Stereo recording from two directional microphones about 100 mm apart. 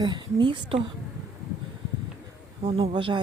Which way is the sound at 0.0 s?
50° right (ahead or behind).